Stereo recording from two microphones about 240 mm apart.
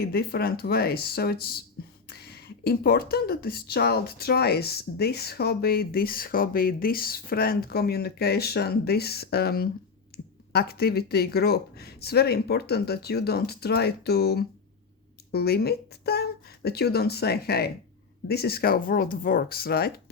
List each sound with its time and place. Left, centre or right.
0.0 s speech: left
10.1 s a sound: left
10.5 s speech: left